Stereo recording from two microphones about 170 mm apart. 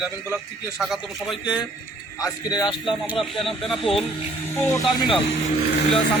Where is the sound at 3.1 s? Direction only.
Centre (ahead or behind).